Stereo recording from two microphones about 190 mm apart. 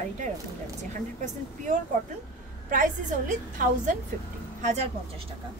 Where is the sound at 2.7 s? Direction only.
45° right (ahead or behind).